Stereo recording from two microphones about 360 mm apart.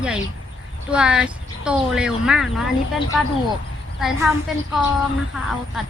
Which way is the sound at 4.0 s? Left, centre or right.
Centre.